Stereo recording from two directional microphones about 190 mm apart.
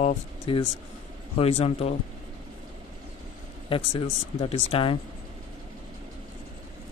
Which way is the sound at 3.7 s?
30° left (ahead or behind).